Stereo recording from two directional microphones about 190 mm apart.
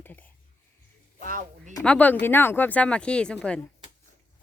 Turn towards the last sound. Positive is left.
turn(degrees=5)  # may be behind; listen again after turning